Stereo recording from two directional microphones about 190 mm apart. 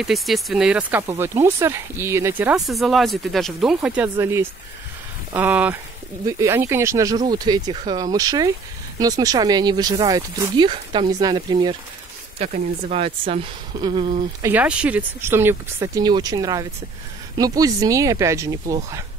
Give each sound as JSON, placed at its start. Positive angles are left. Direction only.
{"t": 0.0, "sound": "speech", "side_deg": 0}
{"t": 12.4, "sound": "speech", "side_deg": -30}
{"t": 14.4, "sound": "speech", "side_deg": -10}